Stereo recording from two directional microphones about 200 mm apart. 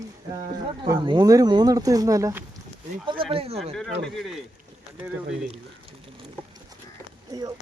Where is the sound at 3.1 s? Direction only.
25° right (ahead or behind).